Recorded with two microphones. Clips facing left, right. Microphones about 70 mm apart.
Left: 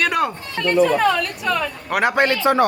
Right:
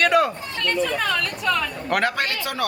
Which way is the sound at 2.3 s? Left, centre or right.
Left.